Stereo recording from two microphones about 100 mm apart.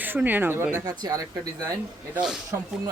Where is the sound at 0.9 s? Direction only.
40° right (ahead or behind).